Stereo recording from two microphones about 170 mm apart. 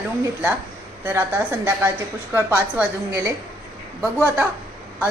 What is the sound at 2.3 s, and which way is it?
Speech, 10° right (ahead or behind).